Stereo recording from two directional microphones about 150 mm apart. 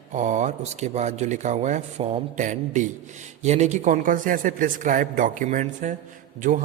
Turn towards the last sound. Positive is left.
turn(degrees=-60)  # may be behind; listen again after turning